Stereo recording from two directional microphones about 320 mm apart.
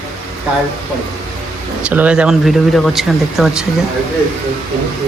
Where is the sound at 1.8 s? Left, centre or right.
Centre.